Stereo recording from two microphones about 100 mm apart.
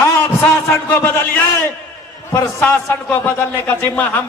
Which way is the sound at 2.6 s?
20° left (ahead or behind).